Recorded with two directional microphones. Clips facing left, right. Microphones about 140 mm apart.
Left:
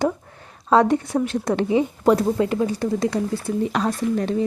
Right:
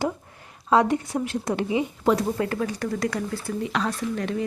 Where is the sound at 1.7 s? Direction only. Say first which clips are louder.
Left 5 dB; 35° left (ahead or behind).